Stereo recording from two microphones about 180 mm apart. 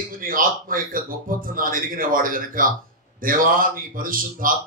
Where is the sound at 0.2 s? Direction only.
50° right (ahead or behind).